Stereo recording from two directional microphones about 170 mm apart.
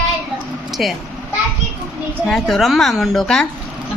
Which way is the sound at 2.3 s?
Centre (ahead or behind).